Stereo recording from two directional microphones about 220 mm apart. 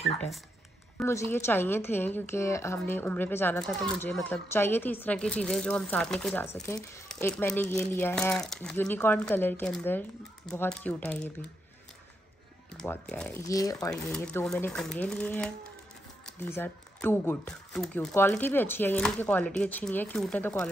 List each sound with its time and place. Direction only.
0.9 s a woman's voice: 10° left (ahead or behind)
12.7 s speech: 5° left (ahead or behind)
13.5 s a woman's voice: 15° left (ahead or behind)
13.8 s a woman's voice: 5° left (ahead or behind)